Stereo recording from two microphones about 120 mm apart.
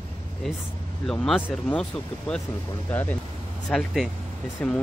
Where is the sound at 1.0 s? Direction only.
5° left (ahead or behind).